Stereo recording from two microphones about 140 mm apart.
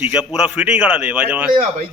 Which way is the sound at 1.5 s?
65° right (ahead or behind).